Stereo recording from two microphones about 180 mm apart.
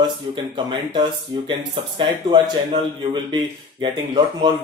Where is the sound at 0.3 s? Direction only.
25° right (ahead or behind).